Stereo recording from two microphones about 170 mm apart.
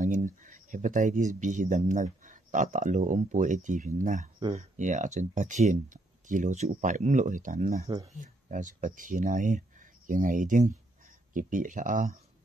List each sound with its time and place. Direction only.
0.0 s speech: 50° right (ahead or behind)